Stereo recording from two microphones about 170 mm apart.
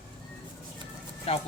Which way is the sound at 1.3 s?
35° left (ahead or behind).